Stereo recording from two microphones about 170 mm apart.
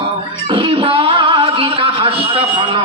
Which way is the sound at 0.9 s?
30° right (ahead or behind).